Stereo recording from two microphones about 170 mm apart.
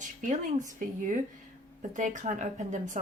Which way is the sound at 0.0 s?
45° right (ahead or behind).